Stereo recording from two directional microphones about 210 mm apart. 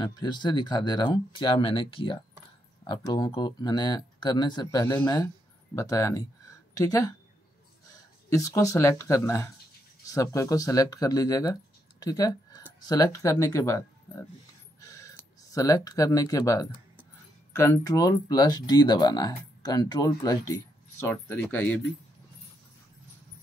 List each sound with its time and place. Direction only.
0.0 s speech: 20° left (ahead or behind)
8.3 s speech: 15° left (ahead or behind)
14.8 s a sound: 15° left (ahead or behind)
17.6 s speech: 15° left (ahead or behind)